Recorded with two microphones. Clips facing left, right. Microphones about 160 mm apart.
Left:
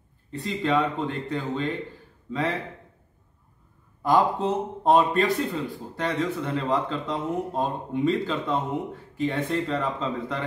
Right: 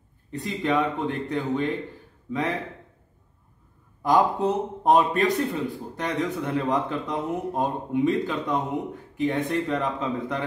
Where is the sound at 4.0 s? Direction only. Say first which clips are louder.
Right 1 dB; 15° right (ahead or behind).